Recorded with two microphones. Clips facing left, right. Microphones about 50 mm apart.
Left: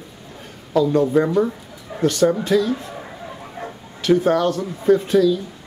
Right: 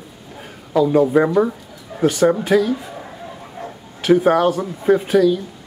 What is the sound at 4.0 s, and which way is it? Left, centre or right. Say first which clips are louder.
Speech: right 3 dB; centre.